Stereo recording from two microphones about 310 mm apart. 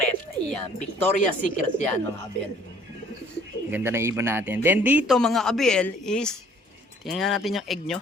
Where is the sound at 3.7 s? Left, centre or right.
Centre.